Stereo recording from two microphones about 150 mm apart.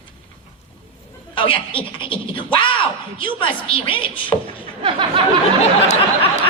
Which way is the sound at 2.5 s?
35° left (ahead or behind).